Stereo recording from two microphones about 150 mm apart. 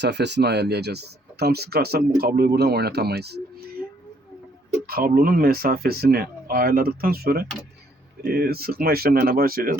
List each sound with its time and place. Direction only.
0.4 s speech: 90° right
4.9 s speech: 85° right